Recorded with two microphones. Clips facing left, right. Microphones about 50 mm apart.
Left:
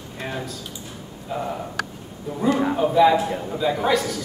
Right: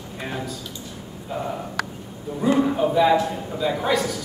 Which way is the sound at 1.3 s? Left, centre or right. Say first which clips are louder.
Left 1 dB; centre.